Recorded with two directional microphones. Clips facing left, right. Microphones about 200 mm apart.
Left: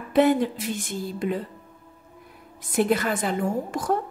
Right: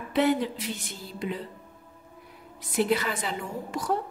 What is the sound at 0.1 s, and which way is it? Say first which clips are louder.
A woman's voice: left 5 dB; 50° left (ahead or behind).